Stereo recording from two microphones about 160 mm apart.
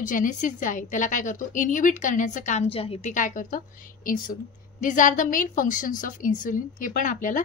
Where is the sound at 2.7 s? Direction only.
35° left (ahead or behind).